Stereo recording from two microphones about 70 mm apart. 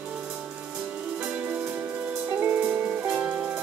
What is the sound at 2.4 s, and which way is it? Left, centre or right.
Music, right.